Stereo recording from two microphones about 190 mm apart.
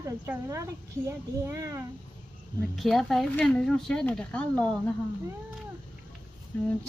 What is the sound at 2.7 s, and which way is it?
Speech, centre (ahead or behind).